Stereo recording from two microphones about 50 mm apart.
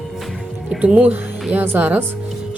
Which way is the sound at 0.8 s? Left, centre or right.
Right.